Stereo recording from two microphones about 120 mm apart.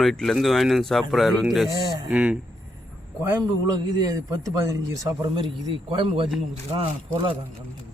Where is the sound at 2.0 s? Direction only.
10° right (ahead or behind).